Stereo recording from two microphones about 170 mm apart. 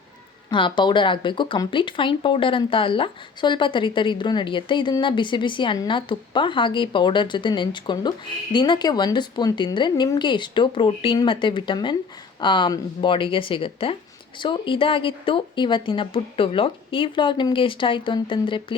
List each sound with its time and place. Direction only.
0.5 s speech: 30° left (ahead or behind)